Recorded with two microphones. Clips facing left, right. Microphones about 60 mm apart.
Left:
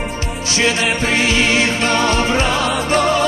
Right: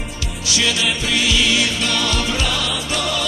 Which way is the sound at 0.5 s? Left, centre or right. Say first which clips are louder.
Left 3 dB; left.